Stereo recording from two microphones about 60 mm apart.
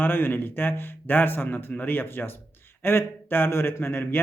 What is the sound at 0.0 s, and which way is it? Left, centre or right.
A man's voice, left.